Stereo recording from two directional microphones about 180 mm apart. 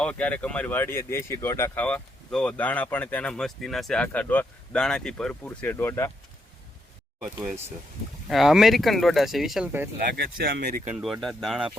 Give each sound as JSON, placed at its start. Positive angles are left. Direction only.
{"t": 0.0, "sound": "speech", "side_deg": 5}
{"t": 7.3, "sound": "speech", "side_deg": -10}
{"t": 8.3, "sound": "speech", "side_deg": 0}
{"t": 10.2, "sound": "speech", "side_deg": -55}
{"t": 10.9, "sound": "speech", "side_deg": 0}